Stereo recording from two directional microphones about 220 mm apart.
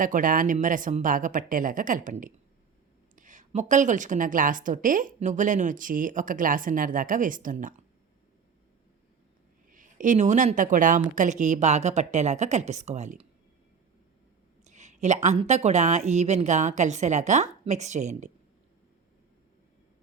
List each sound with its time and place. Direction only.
0.0 s a woman's voice: 35° right (ahead or behind)
9.6 s a woman's voice: 35° right (ahead or behind)
14.6 s a woman's voice: 30° right (ahead or behind)